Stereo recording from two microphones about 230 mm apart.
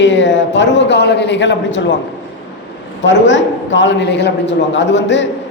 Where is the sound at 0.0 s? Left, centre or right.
Left.